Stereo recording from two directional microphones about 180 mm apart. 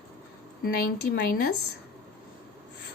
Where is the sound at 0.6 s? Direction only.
55° left (ahead or behind).